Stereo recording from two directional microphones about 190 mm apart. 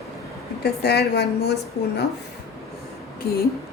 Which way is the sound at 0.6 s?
60° left (ahead or behind).